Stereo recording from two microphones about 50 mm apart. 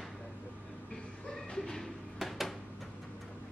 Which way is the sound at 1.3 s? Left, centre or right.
Centre.